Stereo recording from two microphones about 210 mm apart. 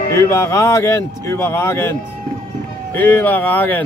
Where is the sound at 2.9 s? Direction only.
10° left (ahead or behind).